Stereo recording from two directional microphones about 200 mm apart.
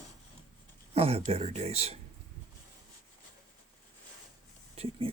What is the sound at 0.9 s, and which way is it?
Speech, 30° right (ahead or behind).